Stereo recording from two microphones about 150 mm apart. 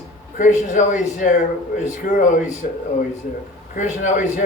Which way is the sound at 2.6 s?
60° left (ahead or behind).